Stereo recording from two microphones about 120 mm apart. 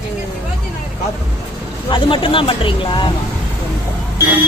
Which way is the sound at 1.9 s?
45° left (ahead or behind).